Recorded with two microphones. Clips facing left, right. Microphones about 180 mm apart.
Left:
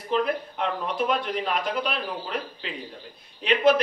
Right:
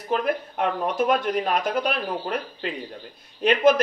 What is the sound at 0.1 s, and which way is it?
Speech, 50° right (ahead or behind).